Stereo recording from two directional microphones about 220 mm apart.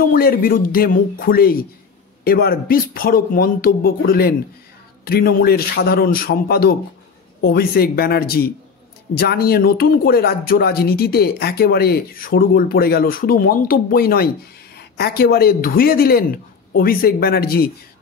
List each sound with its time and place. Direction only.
0.0 s speech: 40° left (ahead or behind)